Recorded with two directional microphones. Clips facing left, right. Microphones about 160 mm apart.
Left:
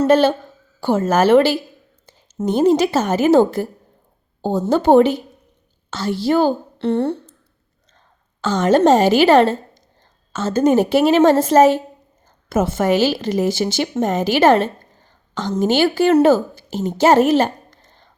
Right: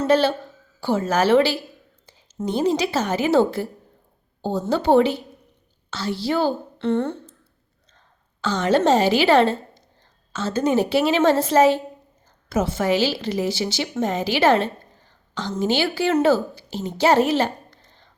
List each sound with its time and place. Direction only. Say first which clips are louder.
0.0 s a woman's voice: left 5 dB; 50° left (ahead or behind)
8.4 s a woman's voice: left 5 dB; 45° left (ahead or behind)